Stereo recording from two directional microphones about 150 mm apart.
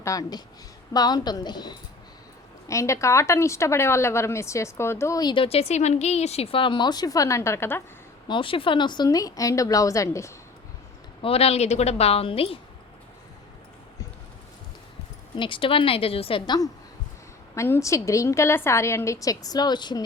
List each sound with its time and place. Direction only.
0.0 s speech: 25° left (ahead or behind)
8.3 s speech: 35° left (ahead or behind); by 10.3 s 20° left (ahead or behind)
11.2 s a woman's voice: 40° left (ahead or behind)
15.4 s a woman's voice: 35° left (ahead or behind)
17.5 s speech: 20° left (ahead or behind)